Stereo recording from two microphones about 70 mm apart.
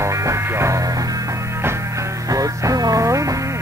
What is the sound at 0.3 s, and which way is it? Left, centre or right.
Music, right.